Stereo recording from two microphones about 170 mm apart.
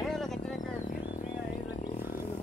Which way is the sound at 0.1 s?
Centre (ahead or behind).